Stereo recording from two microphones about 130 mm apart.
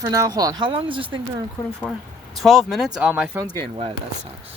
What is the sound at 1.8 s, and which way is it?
Speech, centre (ahead or behind).